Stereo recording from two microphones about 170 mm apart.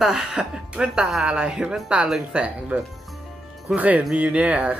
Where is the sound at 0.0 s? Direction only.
5° right (ahead or behind).